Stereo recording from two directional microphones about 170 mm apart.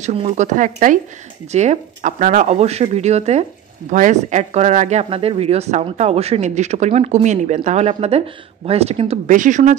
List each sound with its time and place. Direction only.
0.0 s speech: 40° right (ahead or behind)
9.3 s speech: 50° right (ahead or behind)